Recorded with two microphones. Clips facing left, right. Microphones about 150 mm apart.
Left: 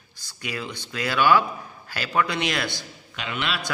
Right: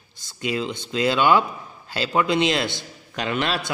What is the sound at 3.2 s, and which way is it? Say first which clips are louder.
Speech: right 5 dB; 40° right (ahead or behind).